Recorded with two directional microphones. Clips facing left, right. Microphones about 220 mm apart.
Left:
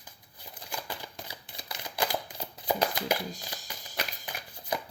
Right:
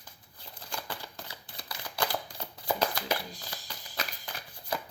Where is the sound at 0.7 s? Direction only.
15° left (ahead or behind).